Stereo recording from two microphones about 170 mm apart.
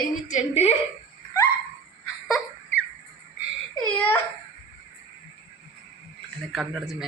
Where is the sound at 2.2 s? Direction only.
Centre (ahead or behind).